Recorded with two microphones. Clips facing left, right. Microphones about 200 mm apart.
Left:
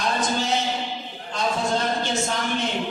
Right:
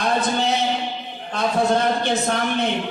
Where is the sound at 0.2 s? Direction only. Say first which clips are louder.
Right 3 dB; 60° right (ahead or behind).